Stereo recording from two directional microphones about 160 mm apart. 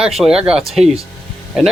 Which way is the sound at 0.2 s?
5° right (ahead or behind).